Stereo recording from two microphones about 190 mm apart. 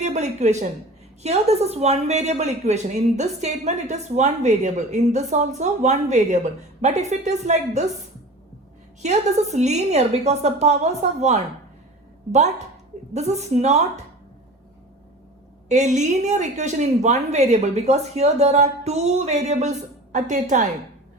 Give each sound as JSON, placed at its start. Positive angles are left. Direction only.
{"t": 0.0, "sound": "a woman's voice", "side_deg": -35}
{"t": 9.0, "sound": "a woman's voice", "side_deg": -35}
{"t": 13.1, "sound": "a woman's voice", "side_deg": -35}
{"t": 15.7, "sound": "a woman's voice", "side_deg": -40}